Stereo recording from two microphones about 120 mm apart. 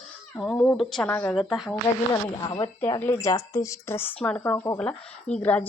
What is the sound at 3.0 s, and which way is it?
Speech, 20° left (ahead or behind).